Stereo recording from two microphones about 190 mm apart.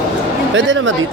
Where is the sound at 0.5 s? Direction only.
80° right.